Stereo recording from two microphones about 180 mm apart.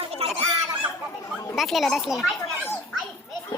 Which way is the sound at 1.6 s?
Centre (ahead or behind).